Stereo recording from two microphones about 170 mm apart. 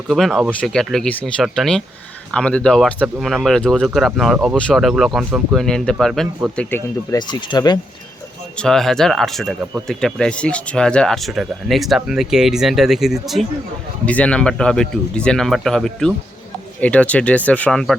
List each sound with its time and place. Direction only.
0.1 s speech: centre (ahead or behind)
7.2 s speech: 25° left (ahead or behind)
8.5 s speech: 5° left (ahead or behind)